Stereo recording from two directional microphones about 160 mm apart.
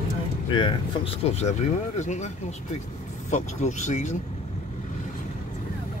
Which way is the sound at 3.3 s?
45° left (ahead or behind).